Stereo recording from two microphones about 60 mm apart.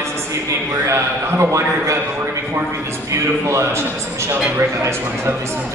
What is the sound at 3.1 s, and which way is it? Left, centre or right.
A man's voice, right.